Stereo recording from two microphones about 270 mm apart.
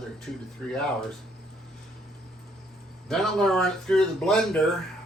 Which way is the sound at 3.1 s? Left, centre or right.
Centre.